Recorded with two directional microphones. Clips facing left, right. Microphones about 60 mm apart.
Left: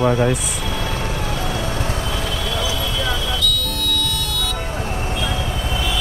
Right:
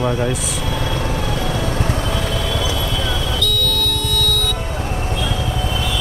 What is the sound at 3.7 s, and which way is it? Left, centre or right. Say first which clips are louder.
Vehicle: right 2 dB; right.